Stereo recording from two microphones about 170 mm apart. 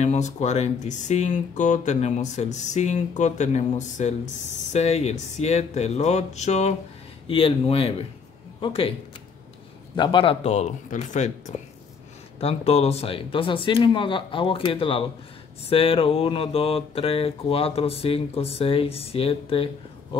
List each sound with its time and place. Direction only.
0.0 s speech: 40° left (ahead or behind)
9.9 s speech: 30° left (ahead or behind)